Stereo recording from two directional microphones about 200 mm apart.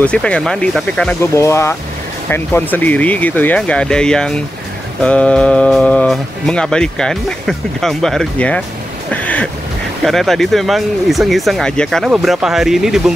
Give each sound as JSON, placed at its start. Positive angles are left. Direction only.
{"t": 0.0, "sound": "speech", "side_deg": 5}
{"t": 9.1, "sound": "a sound", "side_deg": 5}
{"t": 10.0, "sound": "speech", "side_deg": 0}